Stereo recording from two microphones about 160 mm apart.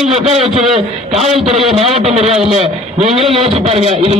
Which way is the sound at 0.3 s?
40° right (ahead or behind).